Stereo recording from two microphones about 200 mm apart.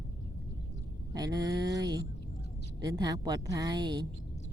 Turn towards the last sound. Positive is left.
turn(degrees=-20)  # may be behind; listen again after turning